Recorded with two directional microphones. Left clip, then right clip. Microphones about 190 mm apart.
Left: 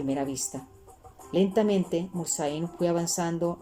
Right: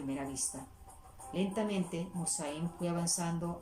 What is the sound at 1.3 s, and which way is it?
Speech, 45° left (ahead or behind).